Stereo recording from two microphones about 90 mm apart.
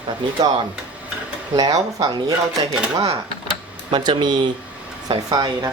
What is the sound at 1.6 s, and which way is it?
Speech, 45° right (ahead or behind).